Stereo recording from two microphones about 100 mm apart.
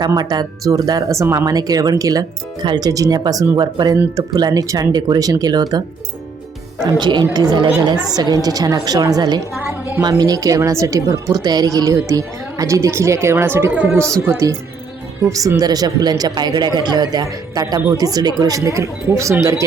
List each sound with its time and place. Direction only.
0.2 s a woman's voice: 45° right (ahead or behind)
7.0 s a woman's voice: 50° right (ahead or behind); by 19.6 s 30° right (ahead or behind)